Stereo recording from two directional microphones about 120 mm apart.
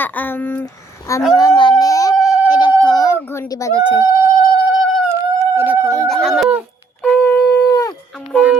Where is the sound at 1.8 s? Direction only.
30° left (ahead or behind).